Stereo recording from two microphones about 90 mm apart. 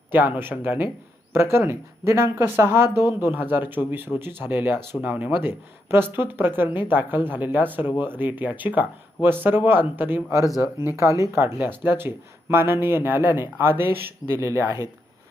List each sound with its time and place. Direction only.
0.3 s speech: 25° right (ahead or behind)